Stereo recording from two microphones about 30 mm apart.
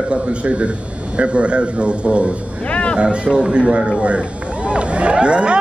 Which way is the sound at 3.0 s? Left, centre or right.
Right.